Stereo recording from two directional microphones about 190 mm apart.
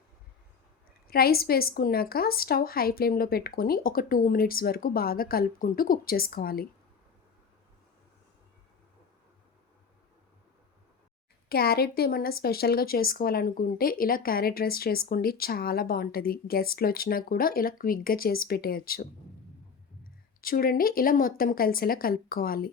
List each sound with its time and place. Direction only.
1.0 s speech: 55° left (ahead or behind)
11.4 s speech: 55° left (ahead or behind)
20.4 s speech: 50° left (ahead or behind)